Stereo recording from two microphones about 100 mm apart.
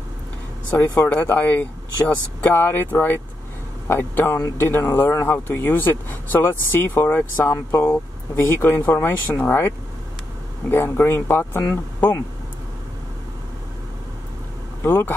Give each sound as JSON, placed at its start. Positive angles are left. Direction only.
{"t": 0.7, "sound": "a man's voice", "side_deg": 20}
{"t": 10.7, "sound": "a man's voice", "side_deg": 25}
{"t": 14.8, "sound": "speech", "side_deg": 20}